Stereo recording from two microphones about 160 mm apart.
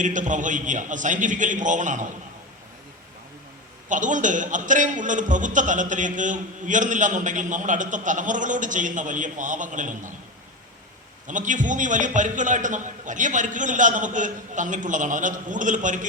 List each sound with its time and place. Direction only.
0.0 s a man's voice: 50° right (ahead or behind)
3.8 s a man's voice: 50° right (ahead or behind)
11.3 s a man's voice: 50° right (ahead or behind)